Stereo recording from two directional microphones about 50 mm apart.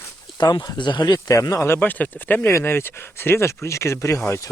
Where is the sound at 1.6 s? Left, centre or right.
Left.